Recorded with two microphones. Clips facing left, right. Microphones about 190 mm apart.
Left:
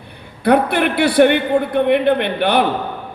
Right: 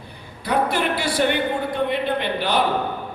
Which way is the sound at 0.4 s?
60° left (ahead or behind).